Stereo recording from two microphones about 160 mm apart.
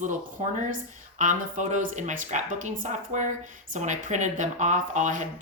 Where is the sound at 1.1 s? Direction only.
50° right (ahead or behind).